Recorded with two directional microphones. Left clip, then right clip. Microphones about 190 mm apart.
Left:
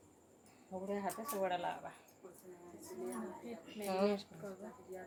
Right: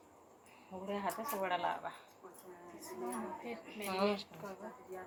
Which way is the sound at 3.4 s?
30° left (ahead or behind).